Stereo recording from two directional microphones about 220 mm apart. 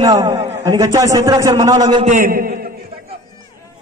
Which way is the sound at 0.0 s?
15° right (ahead or behind).